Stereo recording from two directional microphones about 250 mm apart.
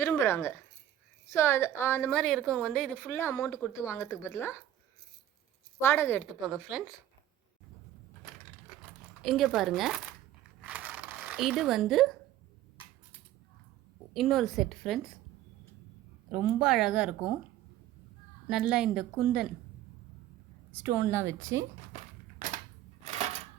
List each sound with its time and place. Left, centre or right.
0.0 s a woman's voice: centre
5.8 s speech: centre
9.2 s speech: centre
10.6 s a sound: centre
14.1 s speech: centre
16.3 s speech: centre
18.4 s speech: centre
20.7 s speech: centre
21.9 s crushing: right